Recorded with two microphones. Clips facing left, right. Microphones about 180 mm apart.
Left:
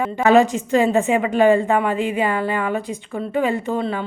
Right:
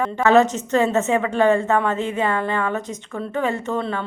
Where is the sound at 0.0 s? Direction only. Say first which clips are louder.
Left 1 dB; 15° left (ahead or behind).